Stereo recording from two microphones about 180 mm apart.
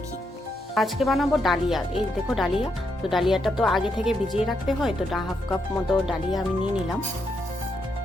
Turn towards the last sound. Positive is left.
turn(degrees=0)  # may be behind; listen again after turning